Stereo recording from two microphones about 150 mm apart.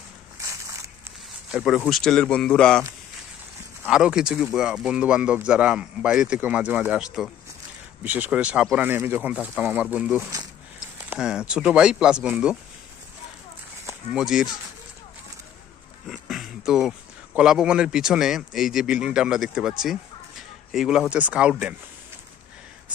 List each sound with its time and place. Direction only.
0.4 s walk: 20° right (ahead or behind)
1.5 s speech: centre (ahead or behind)
3.8 s a man's voice: 5° right (ahead or behind)
14.1 s speech: centre (ahead or behind)
16.1 s speech: centre (ahead or behind)
20.7 s a man's voice: centre (ahead or behind)